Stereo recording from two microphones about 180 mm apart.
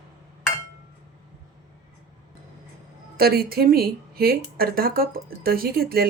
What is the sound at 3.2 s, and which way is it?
Speech, 60° right (ahead or behind).